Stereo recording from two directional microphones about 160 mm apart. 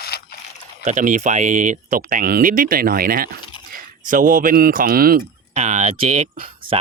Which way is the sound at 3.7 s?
55° right (ahead or behind).